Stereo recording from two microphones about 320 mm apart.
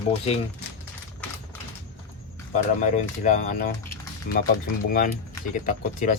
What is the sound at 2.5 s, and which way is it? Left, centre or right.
Speech, left.